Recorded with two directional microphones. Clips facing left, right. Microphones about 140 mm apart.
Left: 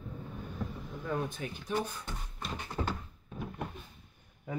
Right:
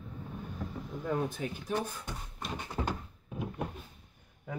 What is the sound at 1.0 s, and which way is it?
Speech, 30° right (ahead or behind).